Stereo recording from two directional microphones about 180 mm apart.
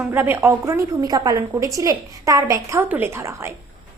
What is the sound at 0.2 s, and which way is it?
A woman's voice, 10° right (ahead or behind).